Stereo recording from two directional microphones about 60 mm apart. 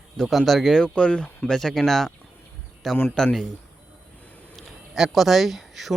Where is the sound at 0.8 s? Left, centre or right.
Centre.